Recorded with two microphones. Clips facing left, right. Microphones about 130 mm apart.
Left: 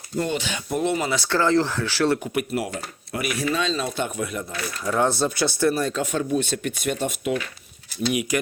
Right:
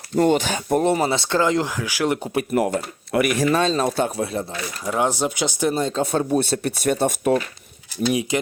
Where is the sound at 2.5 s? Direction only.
50° right (ahead or behind).